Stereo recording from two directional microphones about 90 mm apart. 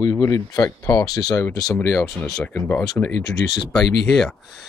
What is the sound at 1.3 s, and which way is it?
Speech, 30° left (ahead or behind).